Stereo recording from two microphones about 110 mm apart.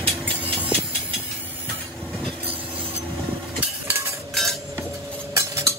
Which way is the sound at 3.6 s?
20° right (ahead or behind).